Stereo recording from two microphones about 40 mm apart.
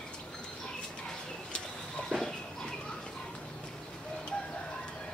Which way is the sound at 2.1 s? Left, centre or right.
Left.